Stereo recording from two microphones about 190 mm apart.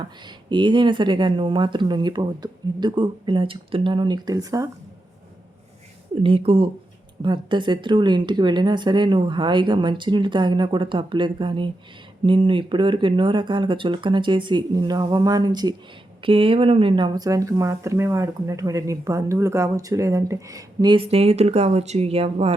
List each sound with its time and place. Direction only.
0.3 s speech: 25° right (ahead or behind)
6.2 s speech: 30° right (ahead or behind)